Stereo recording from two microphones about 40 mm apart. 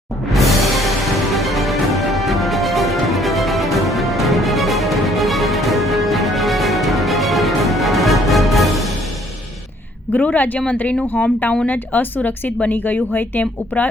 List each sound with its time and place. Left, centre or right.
0.3 s music: centre
10.1 s speech: left